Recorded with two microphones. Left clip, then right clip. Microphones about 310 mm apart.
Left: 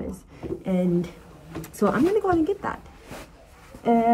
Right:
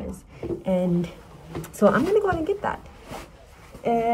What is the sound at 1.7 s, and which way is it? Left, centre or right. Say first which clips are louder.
A woman's voice: right 2 dB; centre.